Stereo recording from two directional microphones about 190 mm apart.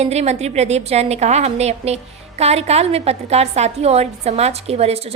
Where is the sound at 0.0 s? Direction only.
35° right (ahead or behind).